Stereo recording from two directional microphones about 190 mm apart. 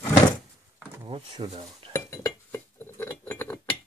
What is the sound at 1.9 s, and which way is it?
Chink, 15° left (ahead or behind).